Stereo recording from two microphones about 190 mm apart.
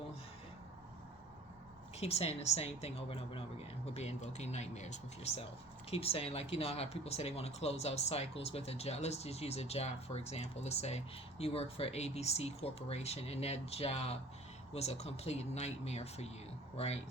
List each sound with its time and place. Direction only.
2.0 s speech: 35° left (ahead or behind)